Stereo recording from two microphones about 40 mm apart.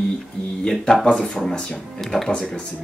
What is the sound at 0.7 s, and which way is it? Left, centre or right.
Speech, centre.